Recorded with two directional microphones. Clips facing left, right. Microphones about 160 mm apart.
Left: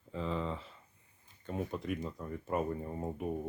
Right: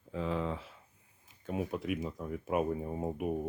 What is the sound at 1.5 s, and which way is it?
Speech, 10° right (ahead or behind).